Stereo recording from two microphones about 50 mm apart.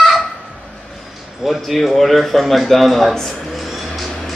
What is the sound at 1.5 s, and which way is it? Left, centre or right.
A man's voice, centre.